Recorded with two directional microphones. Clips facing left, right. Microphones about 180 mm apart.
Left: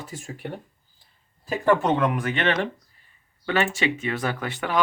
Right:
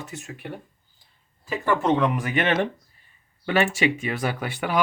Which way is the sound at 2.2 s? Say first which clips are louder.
Right 1 dB; 15° right (ahead or behind).